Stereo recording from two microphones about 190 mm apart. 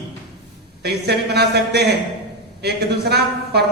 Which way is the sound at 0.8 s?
60° right (ahead or behind).